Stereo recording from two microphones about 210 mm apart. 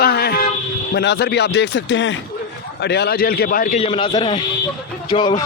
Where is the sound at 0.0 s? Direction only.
50° left (ahead or behind).